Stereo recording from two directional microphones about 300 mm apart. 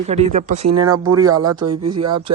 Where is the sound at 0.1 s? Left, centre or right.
Right.